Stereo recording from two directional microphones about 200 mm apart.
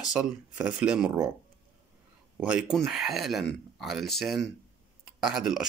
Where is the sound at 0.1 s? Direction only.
5° right (ahead or behind).